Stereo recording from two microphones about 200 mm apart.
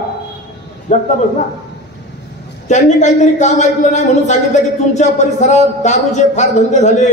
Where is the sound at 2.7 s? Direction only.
35° left (ahead or behind).